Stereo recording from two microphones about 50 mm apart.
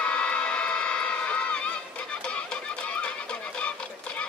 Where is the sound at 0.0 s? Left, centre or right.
Left.